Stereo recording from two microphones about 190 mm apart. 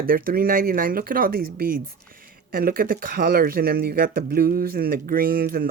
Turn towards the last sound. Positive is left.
turn(degrees=-50)  # may be behind; listen again after turning